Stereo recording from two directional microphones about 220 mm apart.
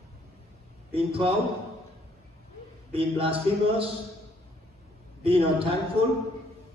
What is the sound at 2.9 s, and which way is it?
Speech, 25° right (ahead or behind).